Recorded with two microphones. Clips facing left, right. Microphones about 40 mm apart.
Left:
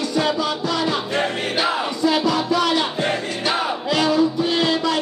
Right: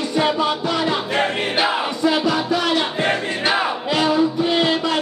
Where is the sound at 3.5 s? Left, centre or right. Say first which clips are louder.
Even; centre.